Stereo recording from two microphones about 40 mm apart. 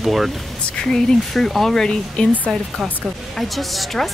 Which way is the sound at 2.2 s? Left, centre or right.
Left.